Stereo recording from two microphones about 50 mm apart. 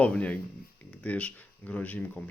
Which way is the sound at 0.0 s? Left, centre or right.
Left.